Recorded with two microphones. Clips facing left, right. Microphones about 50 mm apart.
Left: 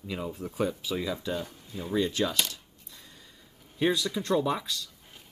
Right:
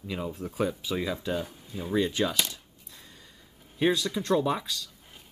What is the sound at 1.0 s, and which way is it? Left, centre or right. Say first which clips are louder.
Speech: right 3 dB; centre.